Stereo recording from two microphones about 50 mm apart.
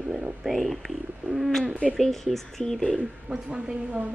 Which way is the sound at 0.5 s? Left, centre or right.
Centre.